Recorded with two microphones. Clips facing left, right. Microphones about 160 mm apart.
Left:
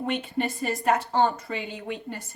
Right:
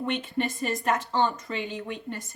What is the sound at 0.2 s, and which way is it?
A woman's voice, 35° left (ahead or behind).